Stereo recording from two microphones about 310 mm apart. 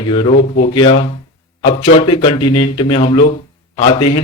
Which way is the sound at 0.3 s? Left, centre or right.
Left.